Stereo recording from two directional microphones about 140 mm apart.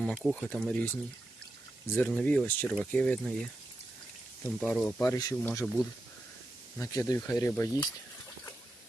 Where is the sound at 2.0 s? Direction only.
10° left (ahead or behind).